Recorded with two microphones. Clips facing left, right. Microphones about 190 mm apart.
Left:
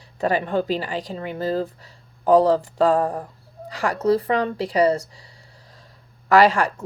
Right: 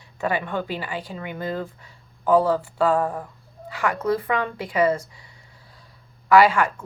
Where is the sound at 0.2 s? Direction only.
35° left (ahead or behind).